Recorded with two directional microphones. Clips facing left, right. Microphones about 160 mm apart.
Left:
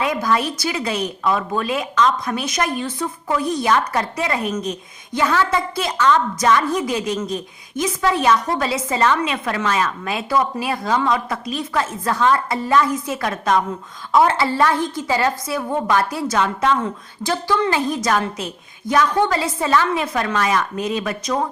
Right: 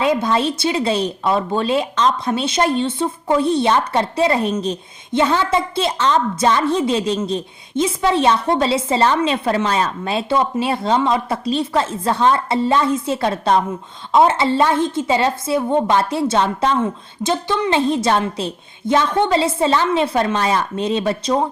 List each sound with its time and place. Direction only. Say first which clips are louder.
0.0 s speech: right 3 dB; 25° right (ahead or behind)